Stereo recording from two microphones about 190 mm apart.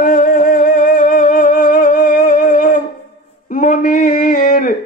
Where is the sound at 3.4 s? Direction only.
45° left (ahead or behind).